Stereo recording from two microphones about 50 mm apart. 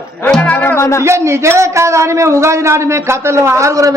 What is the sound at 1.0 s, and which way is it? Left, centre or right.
A man's voice, right.